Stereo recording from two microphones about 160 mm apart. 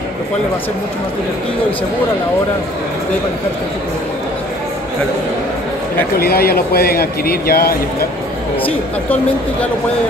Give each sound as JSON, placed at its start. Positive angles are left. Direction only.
{"t": 6.1, "sound": "speech", "side_deg": 75}
{"t": 8.6, "sound": "speech", "side_deg": 10}